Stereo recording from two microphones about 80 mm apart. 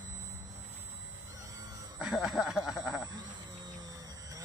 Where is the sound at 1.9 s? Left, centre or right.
Centre.